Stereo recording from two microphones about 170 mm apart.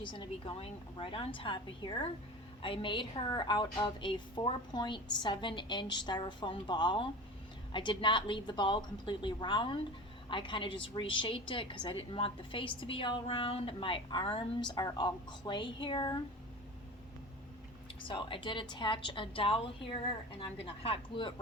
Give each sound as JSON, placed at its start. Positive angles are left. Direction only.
{"t": 0.0, "sound": "a woman's voice", "side_deg": 30}
{"t": 18.1, "sound": "a woman's voice", "side_deg": 30}